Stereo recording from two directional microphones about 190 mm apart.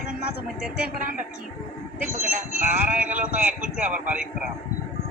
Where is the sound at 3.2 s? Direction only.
45° right (ahead or behind).